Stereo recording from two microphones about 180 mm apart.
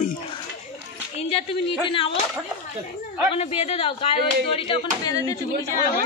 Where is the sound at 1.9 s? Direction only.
30° left (ahead or behind).